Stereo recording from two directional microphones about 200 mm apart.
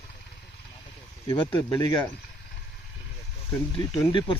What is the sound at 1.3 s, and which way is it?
Speech, 15° left (ahead or behind).